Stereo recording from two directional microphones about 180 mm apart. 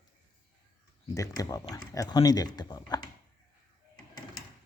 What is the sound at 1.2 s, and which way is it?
Speech, 20° left (ahead or behind).